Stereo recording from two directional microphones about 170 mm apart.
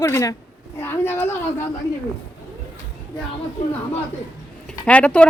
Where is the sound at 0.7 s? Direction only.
15° left (ahead or behind).